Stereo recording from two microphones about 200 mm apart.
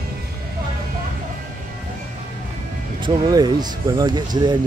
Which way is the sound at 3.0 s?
20° right (ahead or behind).